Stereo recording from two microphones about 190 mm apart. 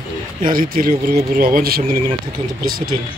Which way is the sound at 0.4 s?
45° right (ahead or behind).